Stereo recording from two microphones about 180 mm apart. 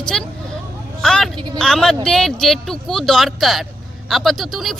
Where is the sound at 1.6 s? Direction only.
Centre (ahead or behind).